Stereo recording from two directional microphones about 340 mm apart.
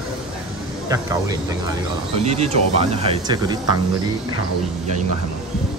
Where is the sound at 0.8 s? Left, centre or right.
Centre.